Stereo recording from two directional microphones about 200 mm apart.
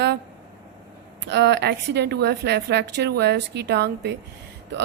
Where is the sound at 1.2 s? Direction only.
60° right (ahead or behind).